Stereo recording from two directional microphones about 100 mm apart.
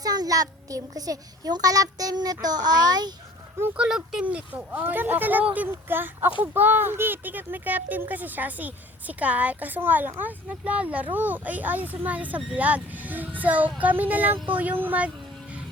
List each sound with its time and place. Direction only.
0.0 s a child's voice: 40° right (ahead or behind)
3.8 s speech: 5° right (ahead or behind)